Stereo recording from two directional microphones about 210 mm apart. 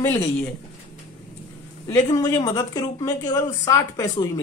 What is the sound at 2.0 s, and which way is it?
Speech, 20° left (ahead or behind).